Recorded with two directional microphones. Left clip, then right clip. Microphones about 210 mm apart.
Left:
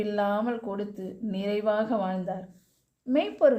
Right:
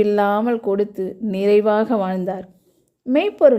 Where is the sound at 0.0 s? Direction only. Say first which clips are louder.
Right 10 dB; 45° right (ahead or behind).